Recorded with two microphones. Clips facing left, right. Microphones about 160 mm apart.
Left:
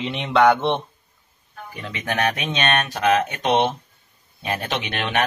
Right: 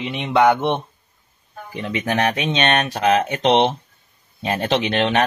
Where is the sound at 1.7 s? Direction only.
30° right (ahead or behind).